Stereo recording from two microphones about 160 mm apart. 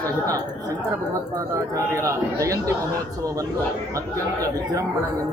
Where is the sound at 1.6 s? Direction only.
20° right (ahead or behind).